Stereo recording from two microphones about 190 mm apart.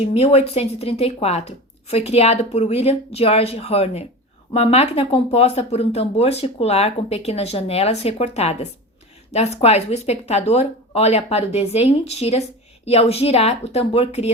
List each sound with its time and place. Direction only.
0.0 s speech: 35° left (ahead or behind)